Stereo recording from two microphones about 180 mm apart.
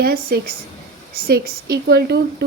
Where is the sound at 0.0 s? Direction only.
60° right (ahead or behind).